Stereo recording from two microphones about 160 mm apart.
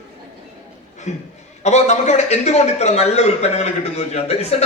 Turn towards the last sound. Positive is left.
turn(degrees=40)  # may be behind; listen again after turning